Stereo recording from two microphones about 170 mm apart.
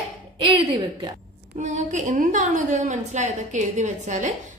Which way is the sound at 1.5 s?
45° right (ahead or behind).